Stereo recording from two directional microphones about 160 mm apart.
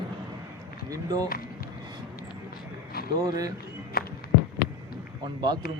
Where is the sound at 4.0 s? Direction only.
70° left (ahead or behind).